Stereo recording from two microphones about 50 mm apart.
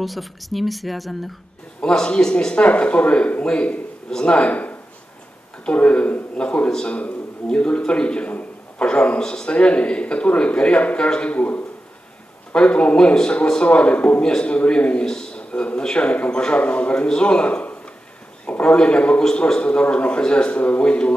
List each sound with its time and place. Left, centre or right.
0.0 s a woman's voice: centre
1.8 s a man's voice: centre